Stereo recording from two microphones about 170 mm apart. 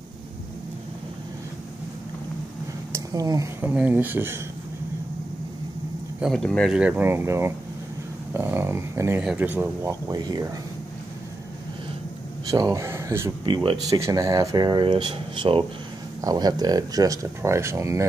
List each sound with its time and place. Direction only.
2.9 s speech: 20° right (ahead or behind)
6.1 s speech: centre (ahead or behind); by 10.4 s 25° right (ahead or behind)
12.4 s speech: 20° right (ahead or behind)
13.4 s speech: 30° right (ahead or behind)
13.9 s speech: 15° right (ahead or behind)